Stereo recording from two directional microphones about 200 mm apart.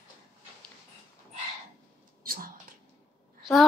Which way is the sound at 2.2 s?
45° right (ahead or behind).